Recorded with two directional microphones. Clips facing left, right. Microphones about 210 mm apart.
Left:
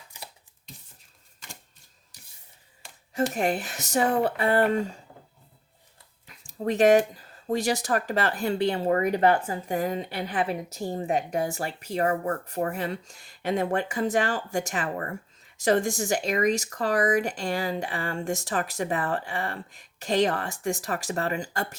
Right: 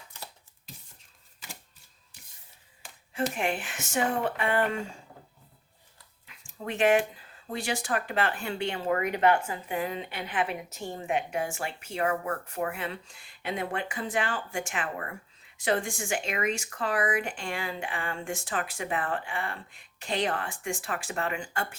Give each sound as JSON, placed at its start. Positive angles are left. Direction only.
{"t": 3.3, "sound": "speech", "side_deg": 40}
{"t": 6.2, "sound": "speech", "side_deg": 40}